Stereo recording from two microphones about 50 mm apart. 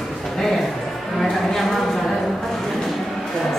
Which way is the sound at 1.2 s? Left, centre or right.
Centre.